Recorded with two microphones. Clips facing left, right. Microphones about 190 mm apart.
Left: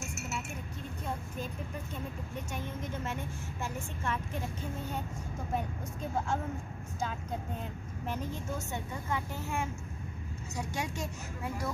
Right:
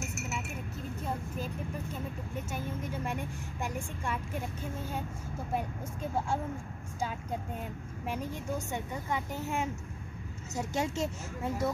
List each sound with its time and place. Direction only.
1.0 s a sound: 5° right (ahead or behind)
2.5 s speech: 10° right (ahead or behind)
8.1 s speech: 15° right (ahead or behind)